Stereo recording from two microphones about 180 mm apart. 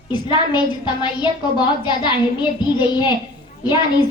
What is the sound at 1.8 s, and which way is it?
A woman's voice, 25° left (ahead or behind).